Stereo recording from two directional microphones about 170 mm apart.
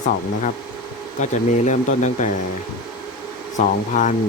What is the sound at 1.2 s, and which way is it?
Speech, 45° left (ahead or behind).